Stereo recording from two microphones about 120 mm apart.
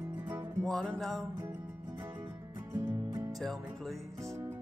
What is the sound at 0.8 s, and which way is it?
Music, 5° left (ahead or behind).